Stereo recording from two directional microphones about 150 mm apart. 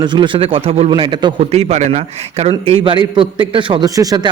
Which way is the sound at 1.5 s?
45° right (ahead or behind).